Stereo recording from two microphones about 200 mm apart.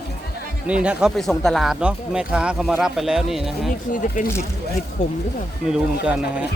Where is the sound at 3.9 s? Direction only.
40° left (ahead or behind).